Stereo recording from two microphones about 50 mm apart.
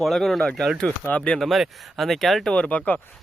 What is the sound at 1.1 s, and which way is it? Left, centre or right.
Speech, left.